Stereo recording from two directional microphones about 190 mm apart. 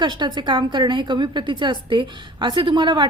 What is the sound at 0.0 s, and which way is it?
A woman's voice, 25° right (ahead or behind).